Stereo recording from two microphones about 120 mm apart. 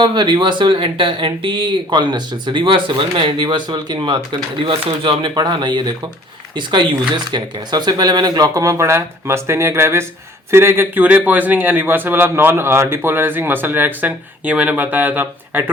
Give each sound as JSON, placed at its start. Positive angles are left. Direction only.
{"t": 0.0, "sound": "a man's voice", "side_deg": -40}